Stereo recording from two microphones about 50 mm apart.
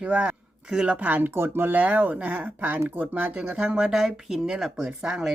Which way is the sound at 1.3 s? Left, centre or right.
Right.